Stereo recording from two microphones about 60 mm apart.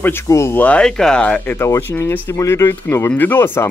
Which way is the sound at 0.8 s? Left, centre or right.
Centre.